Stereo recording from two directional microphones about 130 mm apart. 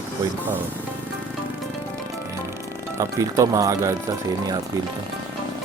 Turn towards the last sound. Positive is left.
turn(degrees=-25)  # may be behind; listen again after turning